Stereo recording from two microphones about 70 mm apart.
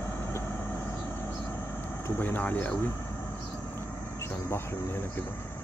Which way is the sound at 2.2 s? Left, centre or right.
Left.